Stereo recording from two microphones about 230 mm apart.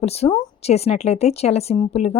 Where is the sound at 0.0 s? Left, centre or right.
Left.